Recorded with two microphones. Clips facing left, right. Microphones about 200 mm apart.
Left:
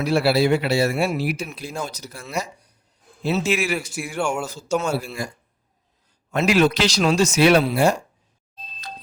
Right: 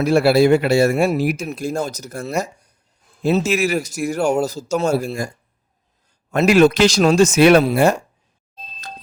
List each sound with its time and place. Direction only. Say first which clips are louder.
0.0 s speech: right 5 dB; 45° right (ahead or behind)
6.3 s speech: right 5 dB; 45° right (ahead or behind)